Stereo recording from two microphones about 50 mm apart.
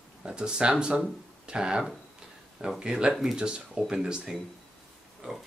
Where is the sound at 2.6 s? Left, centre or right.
Centre.